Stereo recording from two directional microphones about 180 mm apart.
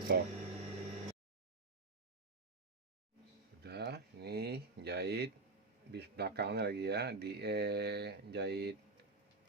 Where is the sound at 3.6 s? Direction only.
65° right (ahead or behind).